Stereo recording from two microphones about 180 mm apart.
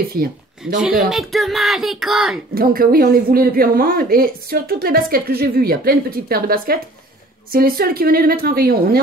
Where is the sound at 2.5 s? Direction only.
55° right (ahead or behind).